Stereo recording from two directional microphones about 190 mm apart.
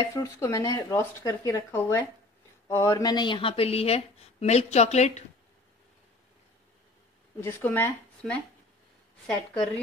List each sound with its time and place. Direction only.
0.0 s speech: 20° left (ahead or behind); by 5.2 s 35° left (ahead or behind)
7.3 s a woman's voice: 10° left (ahead or behind)